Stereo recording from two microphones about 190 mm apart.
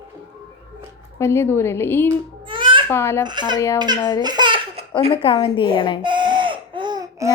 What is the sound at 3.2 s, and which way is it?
Speech, 25° right (ahead or behind).